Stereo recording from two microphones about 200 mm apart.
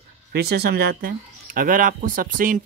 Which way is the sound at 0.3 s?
55° right (ahead or behind).